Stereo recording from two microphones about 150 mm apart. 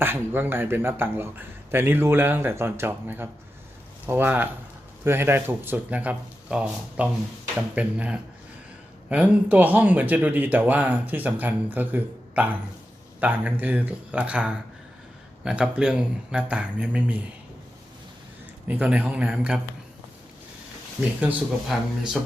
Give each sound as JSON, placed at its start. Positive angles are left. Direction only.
{"t": 0.0, "sound": "speech", "side_deg": -15}
{"t": 18.7, "sound": "speech", "side_deg": -10}
{"t": 21.2, "sound": "speech", "side_deg": -10}